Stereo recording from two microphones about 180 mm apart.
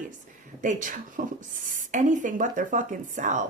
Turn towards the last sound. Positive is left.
turn(degrees=-45)  # may be behind; listen again after turning